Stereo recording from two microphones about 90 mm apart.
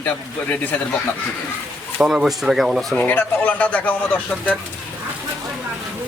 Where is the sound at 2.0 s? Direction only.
5° right (ahead or behind).